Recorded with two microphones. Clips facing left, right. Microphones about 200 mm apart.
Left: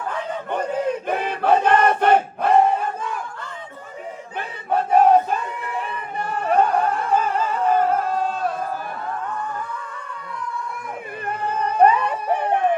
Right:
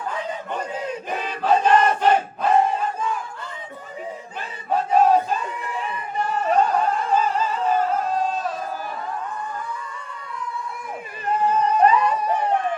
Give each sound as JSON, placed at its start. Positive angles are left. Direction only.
{"t": 0.3, "sound": "battle cry", "side_deg": 60}
{"t": 4.4, "sound": "battle cry", "side_deg": 60}
{"t": 5.8, "sound": "a sound", "side_deg": 55}
{"t": 11.3, "sound": "music", "side_deg": 60}